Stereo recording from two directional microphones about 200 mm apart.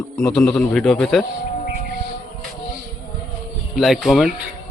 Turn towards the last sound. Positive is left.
turn(degrees=0)  # may be behind; listen again after turning